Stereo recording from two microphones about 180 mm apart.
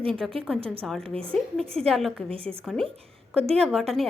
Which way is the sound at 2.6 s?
5° left (ahead or behind).